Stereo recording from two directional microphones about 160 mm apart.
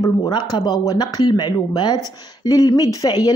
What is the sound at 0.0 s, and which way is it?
Speech, 25° left (ahead or behind).